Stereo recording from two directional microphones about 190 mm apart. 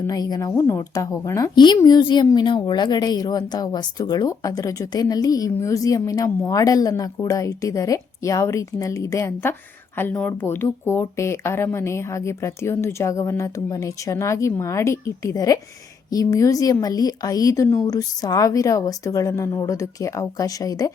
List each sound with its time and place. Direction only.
0.0 s a woman's voice: 20° left (ahead or behind)